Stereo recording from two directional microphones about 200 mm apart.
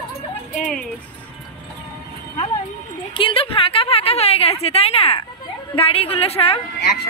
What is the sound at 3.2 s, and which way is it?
A woman's voice, 25° left (ahead or behind).